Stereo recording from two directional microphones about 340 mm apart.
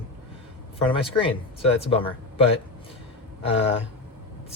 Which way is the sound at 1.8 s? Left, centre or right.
Centre.